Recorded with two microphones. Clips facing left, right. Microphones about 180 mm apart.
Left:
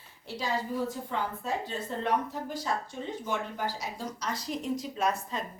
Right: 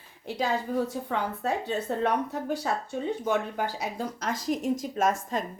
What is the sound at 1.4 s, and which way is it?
Speech, 65° right (ahead or behind).